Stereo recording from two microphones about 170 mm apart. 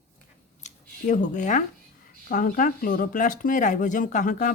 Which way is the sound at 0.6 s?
45° left (ahead or behind).